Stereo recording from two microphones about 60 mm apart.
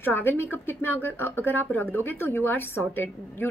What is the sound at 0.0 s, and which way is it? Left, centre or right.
A woman's voice, left.